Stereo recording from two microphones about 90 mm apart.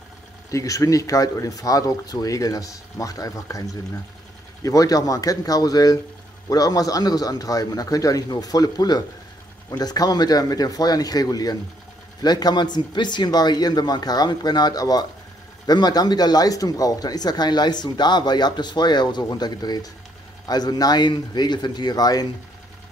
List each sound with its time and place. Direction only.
0.5 s speech: 35° left (ahead or behind)
4.6 s speech: 40° left (ahead or behind)